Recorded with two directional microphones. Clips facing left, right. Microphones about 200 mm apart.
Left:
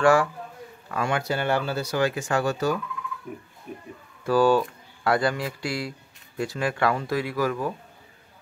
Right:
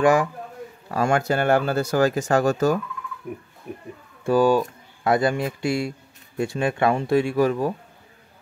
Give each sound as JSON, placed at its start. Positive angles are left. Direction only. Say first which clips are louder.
{"t": 0.0, "sound": "speech", "louder": "right 1 dB", "side_deg": -20}
{"t": 0.8, "sound": "speech", "louder": "right 5 dB", "side_deg": -40}
{"t": 4.2, "sound": "speech", "louder": "right 2 dB", "side_deg": -20}